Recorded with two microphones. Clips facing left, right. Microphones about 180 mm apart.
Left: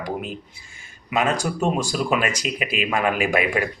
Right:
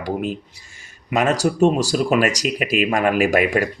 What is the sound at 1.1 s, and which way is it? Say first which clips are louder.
Speech: right 4 dB; 40° right (ahead or behind).